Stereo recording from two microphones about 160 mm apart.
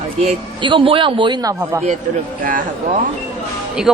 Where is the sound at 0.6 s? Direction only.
30° right (ahead or behind).